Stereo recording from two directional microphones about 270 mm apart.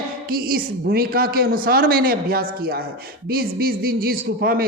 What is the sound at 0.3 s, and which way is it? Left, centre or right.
A man's voice, right.